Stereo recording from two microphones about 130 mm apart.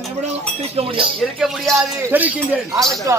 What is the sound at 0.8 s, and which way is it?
Speech, 45° right (ahead or behind).